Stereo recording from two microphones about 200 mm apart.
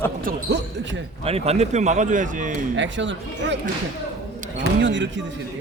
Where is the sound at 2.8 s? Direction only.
65° right (ahead or behind).